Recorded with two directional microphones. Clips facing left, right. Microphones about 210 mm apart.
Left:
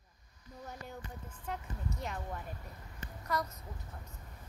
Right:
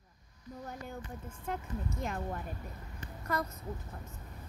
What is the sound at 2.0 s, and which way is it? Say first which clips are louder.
Speech: right 3 dB; 45° right (ahead or behind).